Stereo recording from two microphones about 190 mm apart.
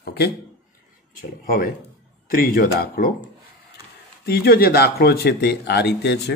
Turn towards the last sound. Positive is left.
turn(degrees=65)  # may be behind; listen again after turning